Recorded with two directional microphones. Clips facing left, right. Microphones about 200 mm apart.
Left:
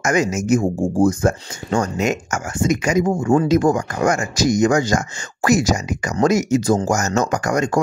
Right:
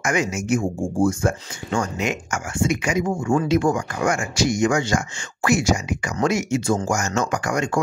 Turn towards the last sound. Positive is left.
turn(degrees=40)  # may be behind; listen again after turning